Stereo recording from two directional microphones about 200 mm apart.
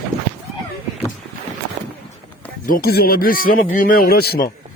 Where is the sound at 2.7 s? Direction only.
50° left (ahead or behind).